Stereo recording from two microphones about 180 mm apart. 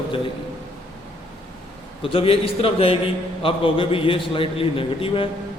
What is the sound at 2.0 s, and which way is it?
A man's voice, 30° left (ahead or behind).